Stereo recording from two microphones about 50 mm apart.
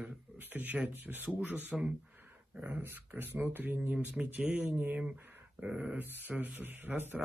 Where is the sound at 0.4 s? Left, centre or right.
Right.